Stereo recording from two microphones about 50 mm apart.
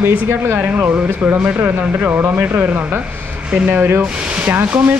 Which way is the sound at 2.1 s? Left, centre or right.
Right.